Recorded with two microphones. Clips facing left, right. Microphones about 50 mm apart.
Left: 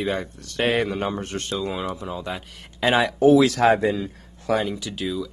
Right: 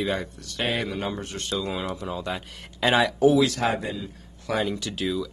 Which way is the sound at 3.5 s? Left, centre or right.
Left.